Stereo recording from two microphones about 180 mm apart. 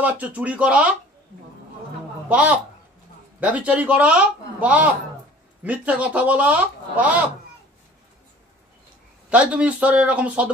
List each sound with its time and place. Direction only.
0.0 s speech: 10° right (ahead or behind)
2.2 s speech: 10° right (ahead or behind)
9.3 s speech: 5° right (ahead or behind)